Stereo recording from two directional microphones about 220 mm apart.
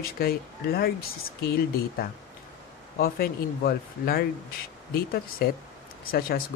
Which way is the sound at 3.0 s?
45° left (ahead or behind).